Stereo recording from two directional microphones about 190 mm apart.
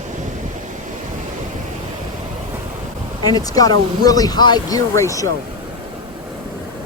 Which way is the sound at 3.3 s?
20° left (ahead or behind).